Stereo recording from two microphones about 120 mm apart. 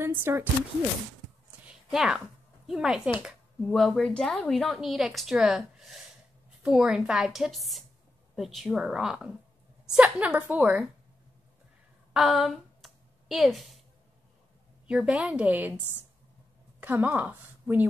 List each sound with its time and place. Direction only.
0.0 s speech: 20° right (ahead or behind)
1.7 s a sound: 5° right (ahead or behind)
3.2 s a woman's voice: centre (ahead or behind)
12.1 s a sound: centre (ahead or behind)
14.9 s a woman's voice: 10° right (ahead or behind)
16.8 s speech: 15° right (ahead or behind)